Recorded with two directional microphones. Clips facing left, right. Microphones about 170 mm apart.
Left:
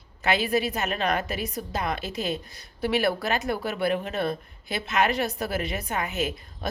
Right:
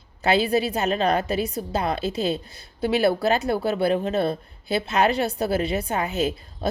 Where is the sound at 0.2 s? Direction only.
30° right (ahead or behind).